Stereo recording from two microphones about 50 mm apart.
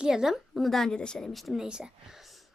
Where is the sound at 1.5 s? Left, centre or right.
Centre.